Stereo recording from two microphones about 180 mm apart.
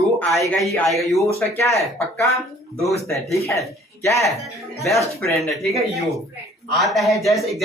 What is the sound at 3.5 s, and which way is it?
Speech, 15° left (ahead or behind).